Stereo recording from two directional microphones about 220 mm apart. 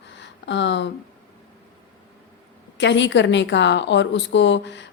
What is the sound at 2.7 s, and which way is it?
A woman's voice, 55° left (ahead or behind).